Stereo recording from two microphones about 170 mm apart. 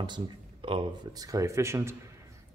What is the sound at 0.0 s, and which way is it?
A man's voice, 30° right (ahead or behind).